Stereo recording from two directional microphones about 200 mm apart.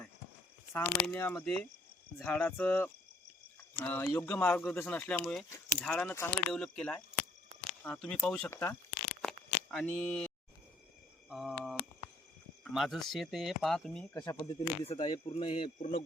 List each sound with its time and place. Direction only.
0.7 s speech: 10° left (ahead or behind)
9.2 s a sound: 5° left (ahead or behind)
11.3 s cricket: 5° right (ahead or behind)
12.6 s speech: centre (ahead or behind)
14.8 s speech: 25° left (ahead or behind)